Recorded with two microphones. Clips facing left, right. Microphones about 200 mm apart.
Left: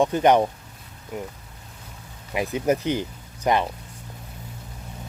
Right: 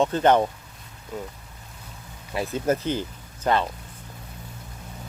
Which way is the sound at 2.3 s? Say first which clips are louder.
Left 2 dB; 15° left (ahead or behind).